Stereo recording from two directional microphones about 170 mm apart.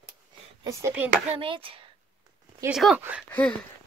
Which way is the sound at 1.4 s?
30° right (ahead or behind).